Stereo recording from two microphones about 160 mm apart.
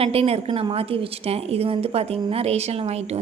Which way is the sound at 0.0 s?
35° right (ahead or behind).